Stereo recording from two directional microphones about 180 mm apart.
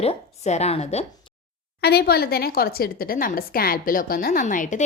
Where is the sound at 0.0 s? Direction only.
35° left (ahead or behind).